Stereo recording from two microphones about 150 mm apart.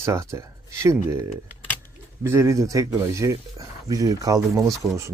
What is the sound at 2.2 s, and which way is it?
Speech, 20° right (ahead or behind).